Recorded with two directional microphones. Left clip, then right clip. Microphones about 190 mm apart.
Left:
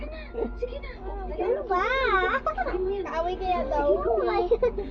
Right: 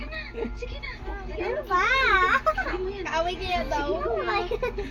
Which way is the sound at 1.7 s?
5° right (ahead or behind).